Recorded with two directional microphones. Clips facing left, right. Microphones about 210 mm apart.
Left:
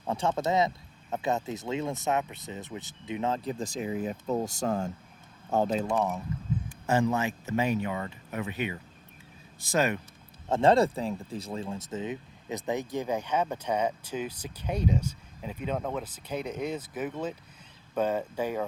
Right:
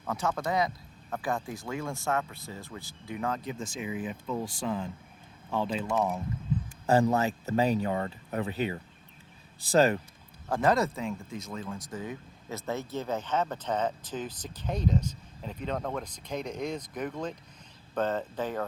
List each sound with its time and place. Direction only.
0.0 s speech: 25° left (ahead or behind); by 5.9 s 45° left (ahead or behind)
6.8 s speech: 35° right (ahead or behind)
10.5 s speech: 25° left (ahead or behind); by 18.6 s 10° left (ahead or behind)